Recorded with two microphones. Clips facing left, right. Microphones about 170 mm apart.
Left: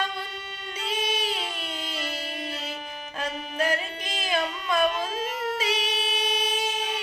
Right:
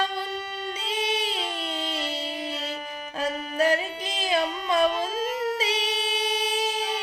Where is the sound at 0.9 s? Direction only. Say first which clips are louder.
Even; 30° right (ahead or behind).